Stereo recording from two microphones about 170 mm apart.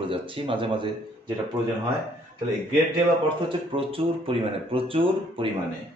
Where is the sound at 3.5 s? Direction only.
30° right (ahead or behind).